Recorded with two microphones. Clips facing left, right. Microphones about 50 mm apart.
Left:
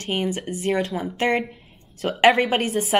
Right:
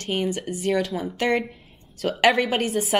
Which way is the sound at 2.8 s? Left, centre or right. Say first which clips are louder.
Left 1 dB; left.